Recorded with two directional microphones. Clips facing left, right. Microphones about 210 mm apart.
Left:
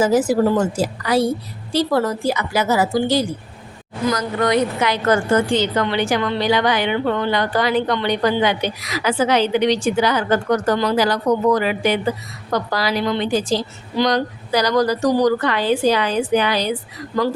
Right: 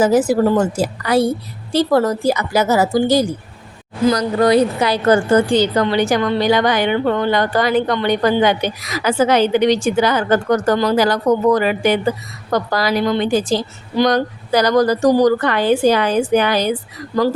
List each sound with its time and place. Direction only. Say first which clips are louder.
0.0 s a woman's voice: right 2 dB; 60° right (ahead or behind)